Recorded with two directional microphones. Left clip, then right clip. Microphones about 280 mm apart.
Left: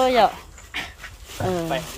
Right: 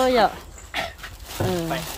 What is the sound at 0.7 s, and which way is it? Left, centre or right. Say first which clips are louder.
Dog: right 3 dB; right.